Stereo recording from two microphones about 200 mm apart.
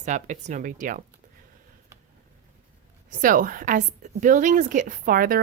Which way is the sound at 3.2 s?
45° right (ahead or behind).